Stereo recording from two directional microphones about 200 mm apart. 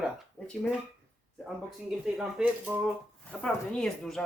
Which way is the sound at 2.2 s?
5° right (ahead or behind).